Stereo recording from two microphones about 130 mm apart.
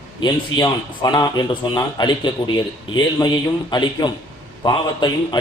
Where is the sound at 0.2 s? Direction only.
30° left (ahead or behind).